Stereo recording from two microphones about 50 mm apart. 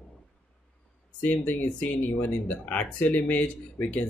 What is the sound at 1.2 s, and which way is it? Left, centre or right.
Speech, left.